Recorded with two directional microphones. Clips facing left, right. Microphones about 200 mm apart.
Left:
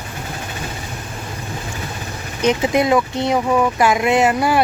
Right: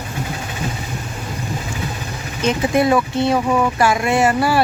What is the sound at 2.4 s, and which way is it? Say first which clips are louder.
Speech: even; 20° left (ahead or behind).